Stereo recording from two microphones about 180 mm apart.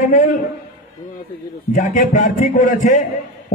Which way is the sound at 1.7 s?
45° left (ahead or behind).